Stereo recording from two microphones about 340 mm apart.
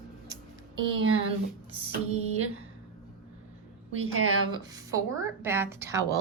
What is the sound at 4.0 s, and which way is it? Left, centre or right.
Speech, right.